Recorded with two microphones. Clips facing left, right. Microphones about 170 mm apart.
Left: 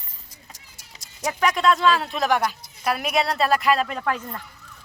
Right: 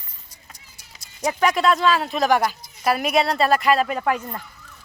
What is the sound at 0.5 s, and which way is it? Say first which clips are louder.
Keys jangling: left 1 dB; 90° left.